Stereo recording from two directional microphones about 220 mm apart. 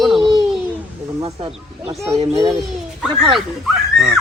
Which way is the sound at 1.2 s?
25° right (ahead or behind).